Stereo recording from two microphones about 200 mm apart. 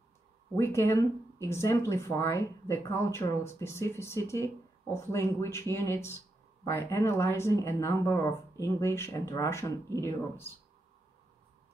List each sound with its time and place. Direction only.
0.6 s speech: 15° left (ahead or behind)